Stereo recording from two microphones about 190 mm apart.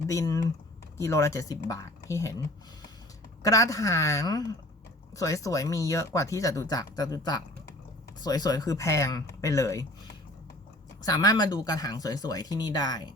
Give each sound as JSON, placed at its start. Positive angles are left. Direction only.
{"t": 0.1, "sound": "speech", "side_deg": 15}
{"t": 3.4, "sound": "speech", "side_deg": 20}
{"t": 11.0, "sound": "speech", "side_deg": 20}